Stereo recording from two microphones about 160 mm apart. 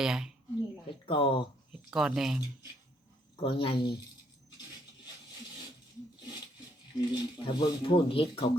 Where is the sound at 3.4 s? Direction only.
30° left (ahead or behind).